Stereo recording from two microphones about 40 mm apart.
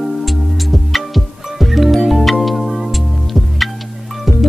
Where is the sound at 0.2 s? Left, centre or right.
Centre.